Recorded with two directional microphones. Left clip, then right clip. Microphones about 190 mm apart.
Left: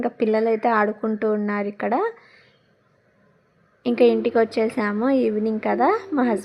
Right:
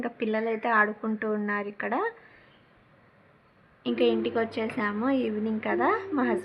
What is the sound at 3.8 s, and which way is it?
Speech, 40° left (ahead or behind).